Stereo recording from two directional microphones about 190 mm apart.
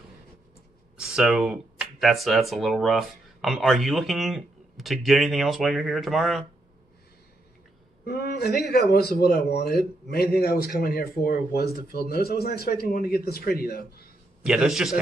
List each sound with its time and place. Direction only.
0.9 s speech: 5° right (ahead or behind)
8.0 s a man's voice: 55° left (ahead or behind)
14.4 s a man's voice: 5° right (ahead or behind)